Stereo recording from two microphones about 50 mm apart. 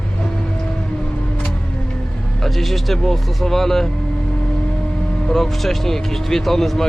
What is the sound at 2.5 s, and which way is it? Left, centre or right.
Speech, centre.